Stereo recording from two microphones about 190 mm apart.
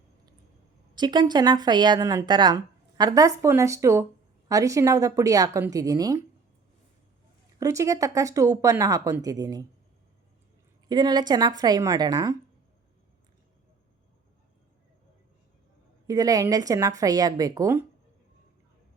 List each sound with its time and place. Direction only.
0.9 s a woman's voice: 20° right (ahead or behind)
7.6 s speech: 15° right (ahead or behind)
10.8 s a woman's voice: 20° right (ahead or behind)
16.0 s a woman's voice: 20° right (ahead or behind)